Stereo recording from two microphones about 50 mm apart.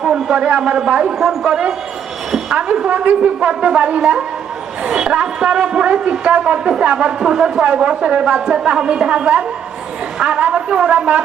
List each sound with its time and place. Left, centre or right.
0.0 s a man's voice: centre
1.2 s a man's voice: centre
1.5 s a woman's voice: centre